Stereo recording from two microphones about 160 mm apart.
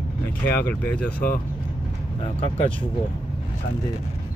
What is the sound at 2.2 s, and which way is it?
Speech, 40° left (ahead or behind).